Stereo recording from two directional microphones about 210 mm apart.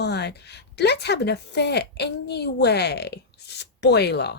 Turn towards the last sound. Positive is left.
turn(degrees=55)  # may be behind; listen again after turning